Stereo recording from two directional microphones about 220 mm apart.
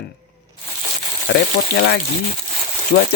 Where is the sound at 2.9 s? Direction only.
45° left (ahead or behind).